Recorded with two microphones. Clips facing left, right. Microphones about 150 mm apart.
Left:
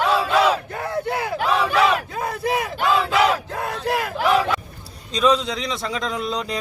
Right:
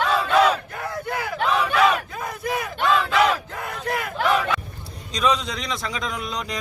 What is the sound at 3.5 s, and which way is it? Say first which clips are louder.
Battle cry: left 4 dB; 35° left (ahead or behind).